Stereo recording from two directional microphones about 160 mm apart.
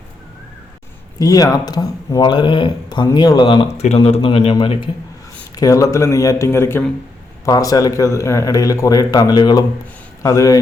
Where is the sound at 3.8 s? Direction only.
40° left (ahead or behind).